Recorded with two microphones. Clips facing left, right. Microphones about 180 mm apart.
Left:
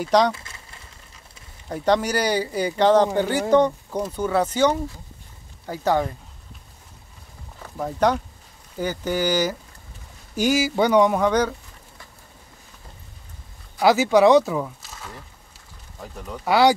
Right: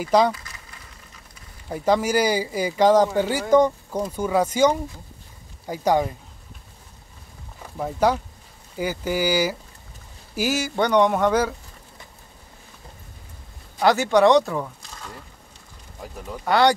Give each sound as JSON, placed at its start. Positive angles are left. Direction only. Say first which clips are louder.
{"t": 0.0, "sound": "speech", "louder": "even", "side_deg": -5}
{"t": 0.3, "sound": "a sound", "louder": "even", "side_deg": 25}
{"t": 1.7, "sound": "speech", "louder": "even", "side_deg": -5}
{"t": 7.7, "sound": "speech", "louder": "even", "side_deg": -5}
{"t": 13.7, "sound": "speech", "louder": "left 1 dB", "side_deg": 5}
{"t": 16.4, "sound": "speech", "louder": "left 1 dB", "side_deg": 5}